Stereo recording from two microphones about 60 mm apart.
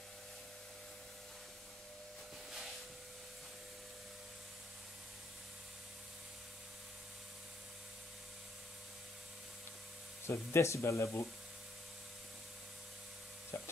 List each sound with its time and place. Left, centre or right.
10.2 s speech: left
13.5 s stir: left